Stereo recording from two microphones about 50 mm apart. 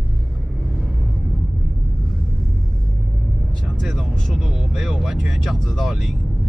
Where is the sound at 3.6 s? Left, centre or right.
Centre.